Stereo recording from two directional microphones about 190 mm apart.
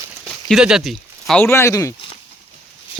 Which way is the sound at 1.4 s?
15° left (ahead or behind).